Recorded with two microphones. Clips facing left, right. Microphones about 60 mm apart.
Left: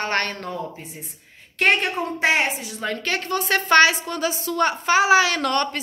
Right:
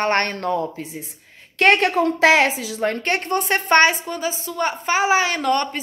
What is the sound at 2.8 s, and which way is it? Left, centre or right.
A woman's voice, right.